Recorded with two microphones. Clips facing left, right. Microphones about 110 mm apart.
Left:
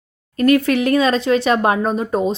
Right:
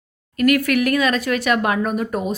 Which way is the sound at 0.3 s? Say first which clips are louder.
Left 2 dB; 30° left (ahead or behind).